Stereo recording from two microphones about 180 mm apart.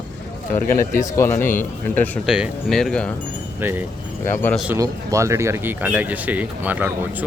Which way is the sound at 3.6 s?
10° right (ahead or behind).